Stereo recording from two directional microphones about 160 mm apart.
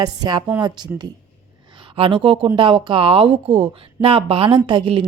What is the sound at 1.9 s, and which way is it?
Speech, 35° right (ahead or behind).